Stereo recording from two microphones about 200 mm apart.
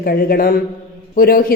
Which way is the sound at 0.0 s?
50° left (ahead or behind).